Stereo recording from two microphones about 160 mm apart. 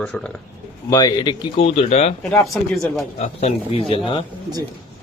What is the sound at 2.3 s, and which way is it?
Speech, centre (ahead or behind).